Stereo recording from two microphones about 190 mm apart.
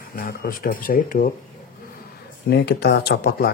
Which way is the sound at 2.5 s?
60° left (ahead or behind).